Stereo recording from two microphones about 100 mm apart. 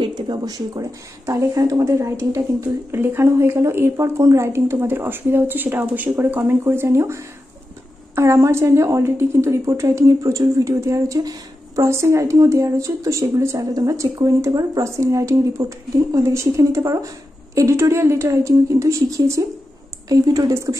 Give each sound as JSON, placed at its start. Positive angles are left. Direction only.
{"t": 0.0, "sound": "speech", "side_deg": -45}
{"t": 8.2, "sound": "a woman's voice", "side_deg": -30}